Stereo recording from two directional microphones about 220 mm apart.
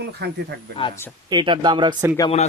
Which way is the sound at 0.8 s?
25° left (ahead or behind).